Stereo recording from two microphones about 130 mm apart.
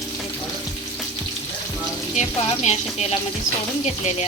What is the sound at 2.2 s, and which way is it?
A woman's voice, 55° left (ahead or behind).